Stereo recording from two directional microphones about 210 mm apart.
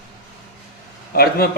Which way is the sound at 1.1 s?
50° left (ahead or behind).